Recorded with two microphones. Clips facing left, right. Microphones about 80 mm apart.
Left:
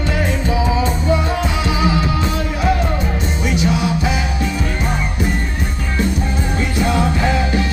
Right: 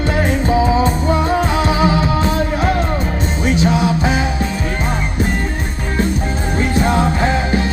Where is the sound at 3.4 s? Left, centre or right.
Right.